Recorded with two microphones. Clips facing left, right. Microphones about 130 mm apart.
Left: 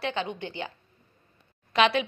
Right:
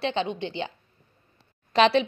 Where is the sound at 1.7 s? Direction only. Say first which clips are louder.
Right 3 dB; 35° right (ahead or behind).